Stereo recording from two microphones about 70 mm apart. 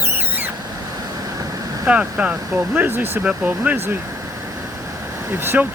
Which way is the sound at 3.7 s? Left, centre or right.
Right.